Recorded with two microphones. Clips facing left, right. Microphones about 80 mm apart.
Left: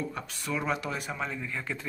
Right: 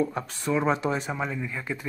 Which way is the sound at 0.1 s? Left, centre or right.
Right.